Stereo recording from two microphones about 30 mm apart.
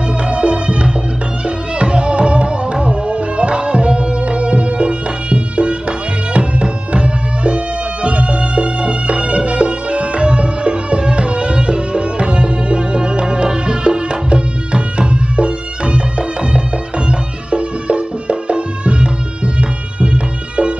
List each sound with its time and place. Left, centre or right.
0.2 s music: right